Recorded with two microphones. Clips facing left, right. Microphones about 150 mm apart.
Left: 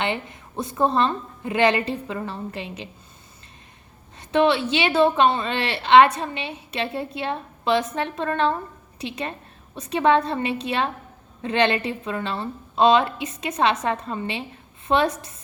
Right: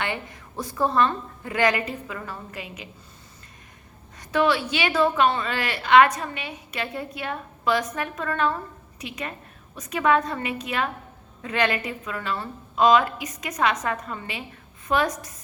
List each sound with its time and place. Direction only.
0.0 s a woman's voice: 25° left (ahead or behind)
4.2 s a woman's voice: 25° left (ahead or behind)